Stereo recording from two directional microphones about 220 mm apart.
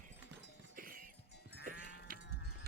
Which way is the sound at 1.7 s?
35° right (ahead or behind).